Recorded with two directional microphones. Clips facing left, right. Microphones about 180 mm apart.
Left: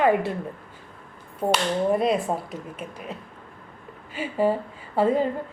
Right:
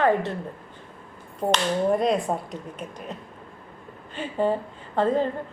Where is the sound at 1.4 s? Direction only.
5° left (ahead or behind).